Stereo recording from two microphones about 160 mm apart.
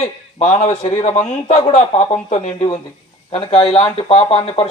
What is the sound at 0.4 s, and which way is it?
A man's voice, 45° left (ahead or behind).